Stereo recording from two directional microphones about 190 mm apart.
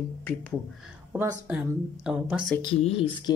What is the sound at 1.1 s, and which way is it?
Speech, 10° right (ahead or behind).